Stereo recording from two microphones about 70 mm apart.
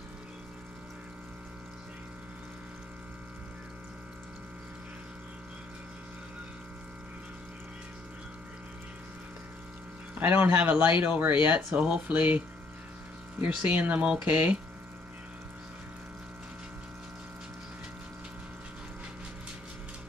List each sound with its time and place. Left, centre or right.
10.1 s speech: right